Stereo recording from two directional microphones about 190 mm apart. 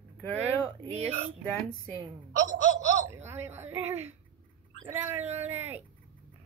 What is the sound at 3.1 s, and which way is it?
Speech, 10° right (ahead or behind).